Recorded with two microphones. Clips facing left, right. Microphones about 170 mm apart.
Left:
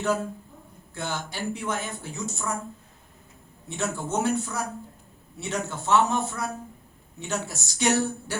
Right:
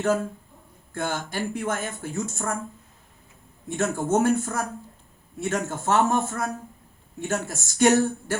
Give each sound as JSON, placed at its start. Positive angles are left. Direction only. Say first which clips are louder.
{"t": 0.9, "sound": "speech", "louder": "right 4 dB", "side_deg": -50}
{"t": 3.7, "sound": "speech", "louder": "right 6 dB", "side_deg": -50}